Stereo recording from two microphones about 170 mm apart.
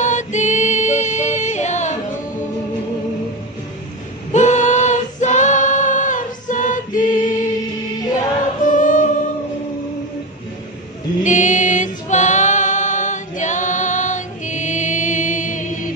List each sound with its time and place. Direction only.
0.0 s yodeling: 45° left (ahead or behind)
4.3 s female singing: 45° left (ahead or behind)
8.6 s choir: 50° left (ahead or behind)
11.2 s music: 45° left (ahead or behind)